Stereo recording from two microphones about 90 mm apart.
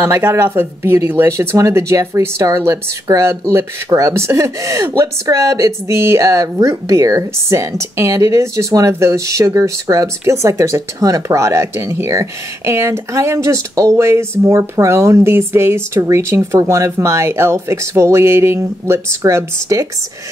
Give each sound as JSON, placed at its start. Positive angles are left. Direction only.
{"t": 0.0, "sound": "a woman's voice", "side_deg": -30}